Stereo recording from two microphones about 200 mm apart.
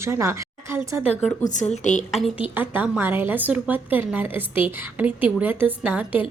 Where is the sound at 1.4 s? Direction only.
40° left (ahead or behind).